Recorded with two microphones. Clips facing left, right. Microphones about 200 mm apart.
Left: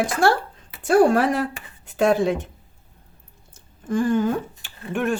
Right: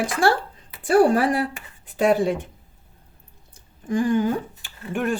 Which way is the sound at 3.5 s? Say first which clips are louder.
Even; 15° right (ahead or behind).